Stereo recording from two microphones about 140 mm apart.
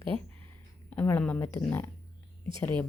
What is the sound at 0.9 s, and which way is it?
Speech, 10° left (ahead or behind).